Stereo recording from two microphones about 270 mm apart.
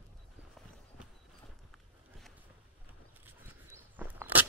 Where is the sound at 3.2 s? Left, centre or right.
Centre.